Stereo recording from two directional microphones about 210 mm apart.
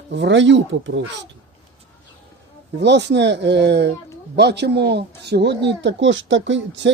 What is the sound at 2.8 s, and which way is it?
Speech, 55° right (ahead or behind).